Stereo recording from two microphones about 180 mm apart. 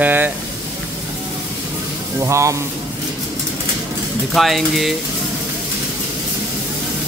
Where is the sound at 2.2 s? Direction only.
15° right (ahead or behind).